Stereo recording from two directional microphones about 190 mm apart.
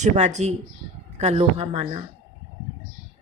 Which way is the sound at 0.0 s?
35° right (ahead or behind).